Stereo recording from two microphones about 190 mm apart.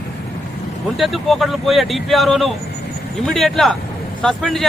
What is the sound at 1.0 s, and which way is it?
Speech, centre (ahead or behind).